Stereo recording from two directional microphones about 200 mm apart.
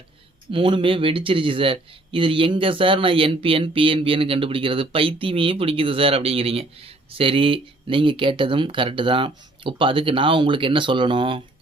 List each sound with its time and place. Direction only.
0.5 s speech: 25° right (ahead or behind)